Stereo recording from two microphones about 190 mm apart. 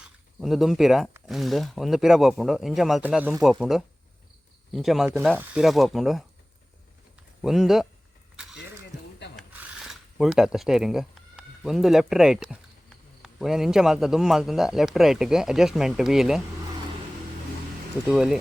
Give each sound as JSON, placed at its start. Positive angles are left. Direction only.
{"t": 0.3, "sound": "a man's voice", "side_deg": 0}
{"t": 7.4, "sound": "a man's voice", "side_deg": 0}
{"t": 8.5, "sound": "a sound", "side_deg": 65}
{"t": 9.3, "sound": "a sound", "side_deg": -5}
{"t": 13.2, "sound": "a man's voice", "side_deg": 0}
{"t": 18.1, "sound": "a man's voice", "side_deg": -5}